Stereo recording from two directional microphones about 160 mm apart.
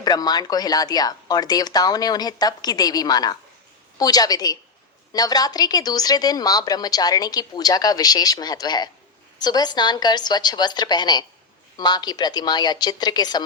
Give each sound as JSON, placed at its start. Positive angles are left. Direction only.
{"t": 0.0, "sound": "a woman's voice", "side_deg": 25}